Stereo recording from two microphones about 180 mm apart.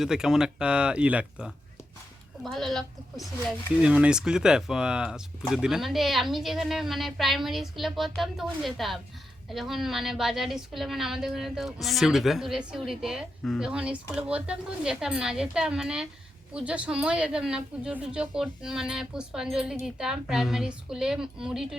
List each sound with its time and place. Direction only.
0.0 s a woman's voice: 5° right (ahead or behind)